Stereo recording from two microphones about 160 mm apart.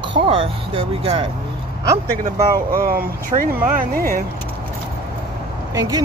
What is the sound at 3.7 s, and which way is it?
Speech, 60° right (ahead or behind).